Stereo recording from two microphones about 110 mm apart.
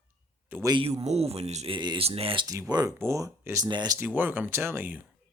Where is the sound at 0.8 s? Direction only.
70° right (ahead or behind).